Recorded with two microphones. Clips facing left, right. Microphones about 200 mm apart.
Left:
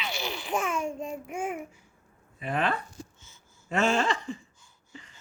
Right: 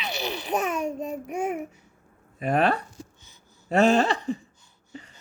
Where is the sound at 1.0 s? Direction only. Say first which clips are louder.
Right 4 dB; 40° right (ahead or behind).